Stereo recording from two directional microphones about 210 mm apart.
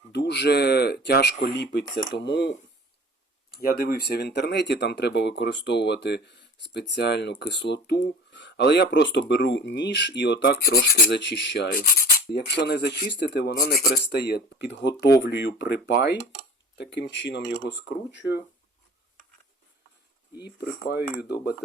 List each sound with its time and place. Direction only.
0.1 s speech: 55° left (ahead or behind)
3.5 s speech: 45° left (ahead or behind)
18.2 s speech: 10° right (ahead or behind)
20.4 s speech: 50° left (ahead or behind)
21.0 s speech: 10° right (ahead or behind)